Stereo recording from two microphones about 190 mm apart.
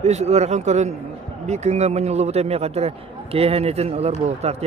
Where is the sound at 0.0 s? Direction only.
35° right (ahead or behind).